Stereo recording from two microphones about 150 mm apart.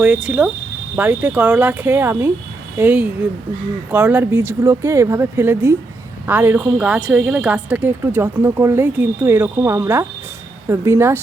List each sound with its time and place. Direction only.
0.0 s speech: 5° right (ahead or behind)